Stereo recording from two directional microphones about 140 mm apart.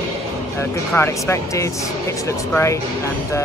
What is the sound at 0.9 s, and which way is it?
Speech, 20° left (ahead or behind).